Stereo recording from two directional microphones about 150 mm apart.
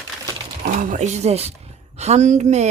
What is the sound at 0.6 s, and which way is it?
Speech, 60° right (ahead or behind).